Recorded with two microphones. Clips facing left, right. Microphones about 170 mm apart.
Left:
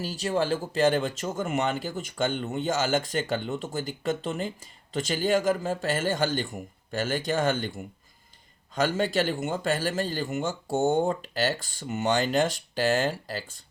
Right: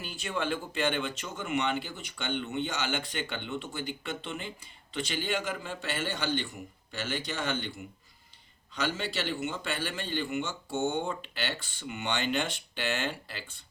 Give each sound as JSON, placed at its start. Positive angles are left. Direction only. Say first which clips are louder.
{"t": 0.0, "sound": "a man's voice", "louder": "left 7 dB", "side_deg": 35}